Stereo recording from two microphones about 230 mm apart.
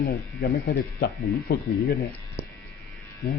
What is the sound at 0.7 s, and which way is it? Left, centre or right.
Speech, left.